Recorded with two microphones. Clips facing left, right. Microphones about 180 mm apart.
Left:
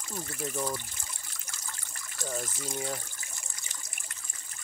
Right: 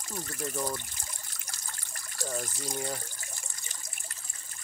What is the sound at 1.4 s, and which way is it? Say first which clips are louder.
Water: left 1 dB; 40° right (ahead or behind).